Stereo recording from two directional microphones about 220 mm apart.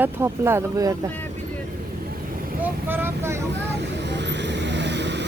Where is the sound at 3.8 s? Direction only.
50° right (ahead or behind).